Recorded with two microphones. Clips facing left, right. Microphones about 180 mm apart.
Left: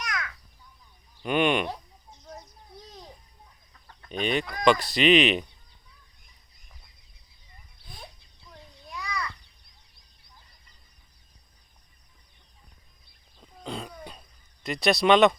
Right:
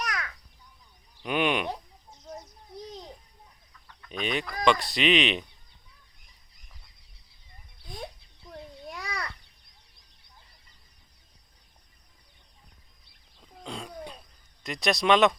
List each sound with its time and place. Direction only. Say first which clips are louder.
0.0 s a sound: right 1 dB; 35° right (ahead or behind)
1.2 s speech: left 3 dB; centre (ahead or behind)
4.2 s speech: left 3 dB; centre (ahead or behind)
8.4 s a sound: right 7 dB; 55° right (ahead or behind)
13.7 s cough: left 1 dB; centre (ahead or behind)
14.6 s speech: left 4 dB; centre (ahead or behind)